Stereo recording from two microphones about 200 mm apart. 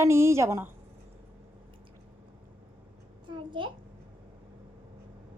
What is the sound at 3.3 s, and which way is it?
Speech, 25° right (ahead or behind).